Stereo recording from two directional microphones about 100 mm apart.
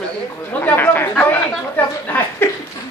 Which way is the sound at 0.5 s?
15° left (ahead or behind).